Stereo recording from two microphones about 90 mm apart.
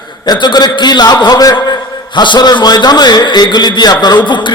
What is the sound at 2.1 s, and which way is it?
A man's voice, 60° left (ahead or behind).